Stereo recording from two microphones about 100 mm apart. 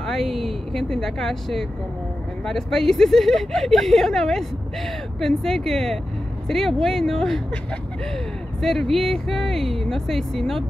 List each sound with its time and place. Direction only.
0.0 s a woman's voice: centre (ahead or behind)
8.5 s a woman's voice: centre (ahead or behind)